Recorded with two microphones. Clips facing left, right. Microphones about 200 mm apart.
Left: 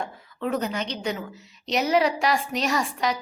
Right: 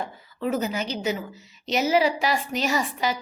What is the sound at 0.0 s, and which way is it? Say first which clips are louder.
A woman's voice: right 1 dB; 5° right (ahead or behind).